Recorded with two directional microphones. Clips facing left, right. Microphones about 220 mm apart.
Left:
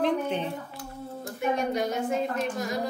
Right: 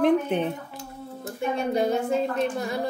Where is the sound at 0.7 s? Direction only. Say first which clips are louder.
Even; 25° right (ahead or behind).